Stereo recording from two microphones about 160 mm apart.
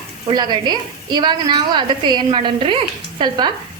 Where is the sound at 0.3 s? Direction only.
25° right (ahead or behind).